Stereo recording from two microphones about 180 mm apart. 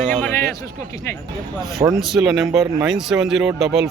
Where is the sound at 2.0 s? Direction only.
Centre (ahead or behind).